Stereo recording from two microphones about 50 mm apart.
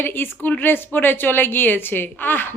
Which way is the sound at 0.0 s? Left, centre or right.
Left.